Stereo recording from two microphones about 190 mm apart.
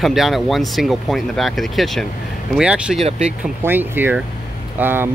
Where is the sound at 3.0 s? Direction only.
30° right (ahead or behind).